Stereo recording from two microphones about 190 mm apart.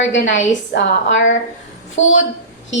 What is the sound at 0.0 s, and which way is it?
A woman's voice, 75° left (ahead or behind).